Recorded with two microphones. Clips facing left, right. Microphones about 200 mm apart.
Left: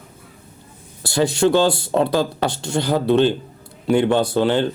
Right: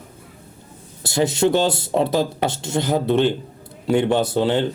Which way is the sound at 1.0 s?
20° right (ahead or behind).